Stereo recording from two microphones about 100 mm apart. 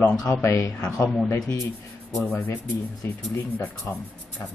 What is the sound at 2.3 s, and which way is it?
Speech, 25° left (ahead or behind).